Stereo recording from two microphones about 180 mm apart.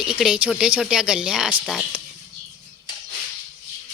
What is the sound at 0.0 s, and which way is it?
Speech, 5° right (ahead or behind).